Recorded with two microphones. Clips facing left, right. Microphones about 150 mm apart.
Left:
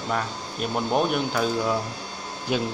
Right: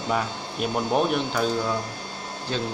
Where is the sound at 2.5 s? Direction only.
15° left (ahead or behind).